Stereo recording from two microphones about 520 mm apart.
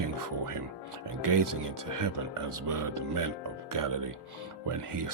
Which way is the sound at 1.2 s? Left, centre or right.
Right.